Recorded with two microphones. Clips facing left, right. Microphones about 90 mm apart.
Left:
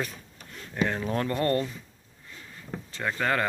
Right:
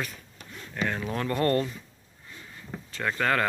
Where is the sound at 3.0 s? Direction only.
15° left (ahead or behind).